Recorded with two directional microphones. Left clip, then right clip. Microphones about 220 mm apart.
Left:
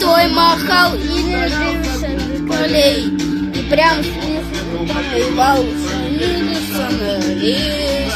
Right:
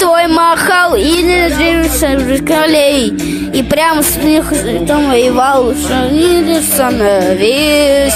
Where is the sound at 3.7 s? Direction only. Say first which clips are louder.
Right 1 dB; 45° right (ahead or behind).